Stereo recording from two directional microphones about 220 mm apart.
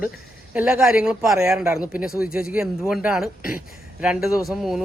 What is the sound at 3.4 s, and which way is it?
Speech, 40° left (ahead or behind).